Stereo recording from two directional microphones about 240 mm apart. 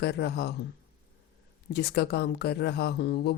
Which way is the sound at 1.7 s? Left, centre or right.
Left.